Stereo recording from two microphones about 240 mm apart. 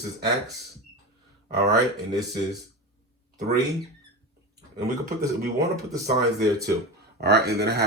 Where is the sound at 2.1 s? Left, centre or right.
Centre.